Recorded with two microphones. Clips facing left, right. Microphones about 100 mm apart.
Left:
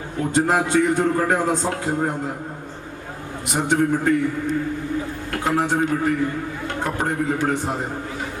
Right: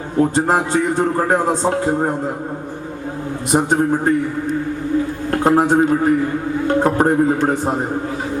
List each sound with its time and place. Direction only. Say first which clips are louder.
0.2 s a man's voice: right 4 dB; 35° right (ahead or behind)
3.5 s a man's voice: right 4 dB; 35° right (ahead or behind)
5.3 s a man's voice: right 7 dB; 40° right (ahead or behind)